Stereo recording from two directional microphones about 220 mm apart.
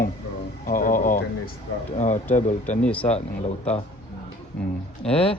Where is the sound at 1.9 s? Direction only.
30° left (ahead or behind).